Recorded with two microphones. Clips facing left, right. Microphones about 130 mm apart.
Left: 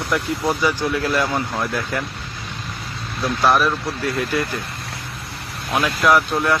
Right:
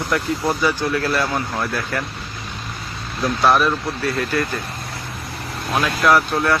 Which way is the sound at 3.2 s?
Centre (ahead or behind).